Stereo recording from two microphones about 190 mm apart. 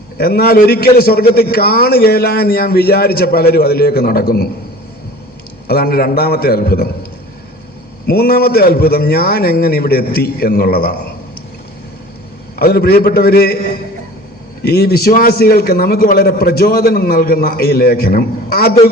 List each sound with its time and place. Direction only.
0.2 s a man's voice: 55° left (ahead or behind)
5.6 s a man's voice: 55° left (ahead or behind)
8.0 s a man's voice: 55° left (ahead or behind)
12.5 s a man's voice: 55° left (ahead or behind)
14.6 s a man's voice: 55° left (ahead or behind)